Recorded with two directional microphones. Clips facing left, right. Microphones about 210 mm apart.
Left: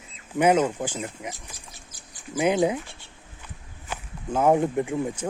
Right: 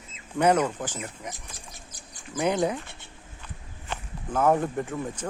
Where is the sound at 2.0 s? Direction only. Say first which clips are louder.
Left 3 dB; 15° left (ahead or behind).